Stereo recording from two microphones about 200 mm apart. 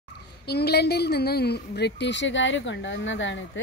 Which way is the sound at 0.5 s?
55° left (ahead or behind).